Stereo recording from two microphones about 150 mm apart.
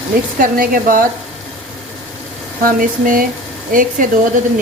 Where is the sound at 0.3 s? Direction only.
70° right (ahead or behind).